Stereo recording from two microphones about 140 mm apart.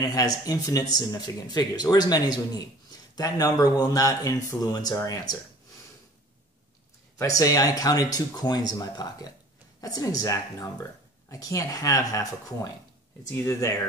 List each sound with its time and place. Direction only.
0.0 s speech: 25° left (ahead or behind)
7.2 s speech: 25° left (ahead or behind)